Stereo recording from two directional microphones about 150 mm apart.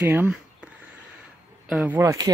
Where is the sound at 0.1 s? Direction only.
5° right (ahead or behind).